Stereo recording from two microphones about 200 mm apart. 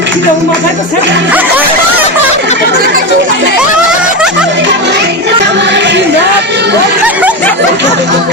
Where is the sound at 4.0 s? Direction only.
5° right (ahead or behind).